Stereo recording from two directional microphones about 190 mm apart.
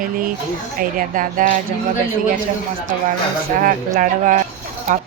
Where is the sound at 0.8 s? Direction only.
45° right (ahead or behind).